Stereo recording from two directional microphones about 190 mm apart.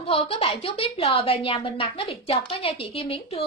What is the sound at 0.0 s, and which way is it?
A woman's voice, 30° left (ahead or behind).